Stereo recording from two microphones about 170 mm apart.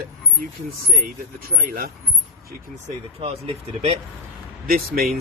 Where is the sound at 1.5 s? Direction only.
60° right (ahead or behind).